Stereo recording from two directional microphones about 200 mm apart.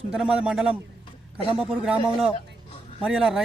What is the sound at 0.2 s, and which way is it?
Speech, 5° right (ahead or behind).